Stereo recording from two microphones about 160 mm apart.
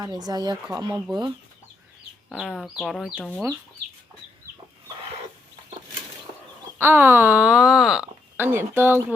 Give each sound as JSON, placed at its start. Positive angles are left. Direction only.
{"t": 0.0, "sound": "speech", "side_deg": -25}
{"t": 2.3, "sound": "speech", "side_deg": -5}
{"t": 6.7, "sound": "speech", "side_deg": -15}